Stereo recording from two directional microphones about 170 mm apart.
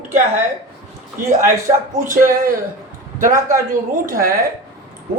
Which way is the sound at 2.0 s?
50° right (ahead or behind).